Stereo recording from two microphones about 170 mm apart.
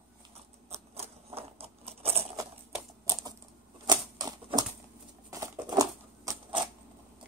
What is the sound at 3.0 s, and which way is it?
Typing, 20° right (ahead or behind).